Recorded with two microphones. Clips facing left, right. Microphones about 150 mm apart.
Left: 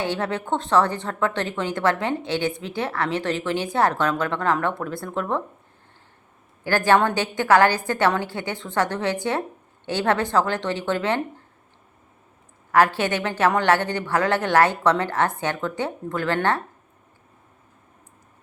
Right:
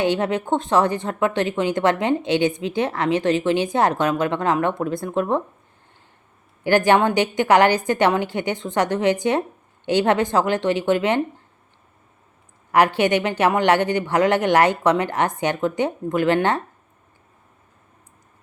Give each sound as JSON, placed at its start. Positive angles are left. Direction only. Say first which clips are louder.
{"t": 0.0, "sound": "a woman's voice", "louder": "right 5 dB", "side_deg": -15}
{"t": 6.7, "sound": "a woman's voice", "louder": "right 3 dB", "side_deg": -15}
{"t": 12.7, "sound": "a woman's voice", "louder": "right 2 dB", "side_deg": -15}